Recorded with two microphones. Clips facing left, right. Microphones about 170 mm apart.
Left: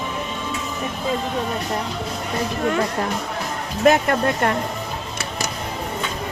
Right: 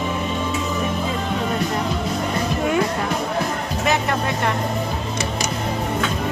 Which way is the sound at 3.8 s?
50° left (ahead or behind).